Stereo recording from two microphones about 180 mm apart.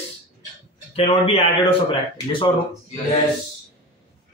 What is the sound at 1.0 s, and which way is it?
A man's voice, 30° left (ahead or behind).